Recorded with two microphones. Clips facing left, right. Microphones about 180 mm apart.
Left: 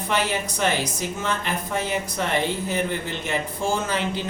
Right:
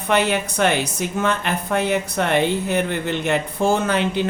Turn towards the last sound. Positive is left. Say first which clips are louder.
# right 5 dB
turn(degrees=-60)  # may be behind; listen again after turning